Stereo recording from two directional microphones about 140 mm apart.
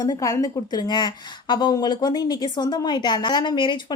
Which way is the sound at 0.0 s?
25° left (ahead or behind).